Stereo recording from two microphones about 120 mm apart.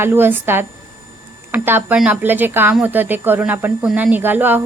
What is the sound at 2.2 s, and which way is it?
A woman's voice, 15° right (ahead or behind).